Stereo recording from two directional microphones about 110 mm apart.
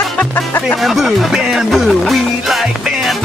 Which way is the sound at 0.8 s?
Centre (ahead or behind).